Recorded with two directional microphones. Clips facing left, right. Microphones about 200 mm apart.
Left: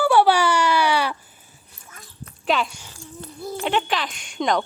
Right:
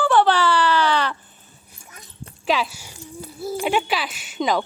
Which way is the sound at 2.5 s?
Centre (ahead or behind).